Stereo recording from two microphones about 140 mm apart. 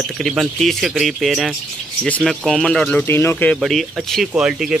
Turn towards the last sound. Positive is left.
turn(degrees=-5)  # may be behind; listen again after turning